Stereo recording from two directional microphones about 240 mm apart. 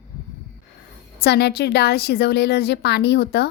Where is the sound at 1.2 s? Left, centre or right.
Left.